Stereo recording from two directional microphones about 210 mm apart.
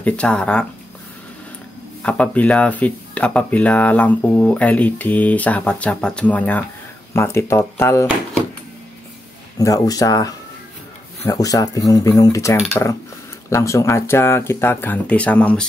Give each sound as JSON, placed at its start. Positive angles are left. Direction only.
{"t": 0.0, "sound": "speech", "side_deg": 5}
{"t": 2.0, "sound": "speech", "side_deg": 5}
{"t": 9.6, "sound": "speech", "side_deg": 15}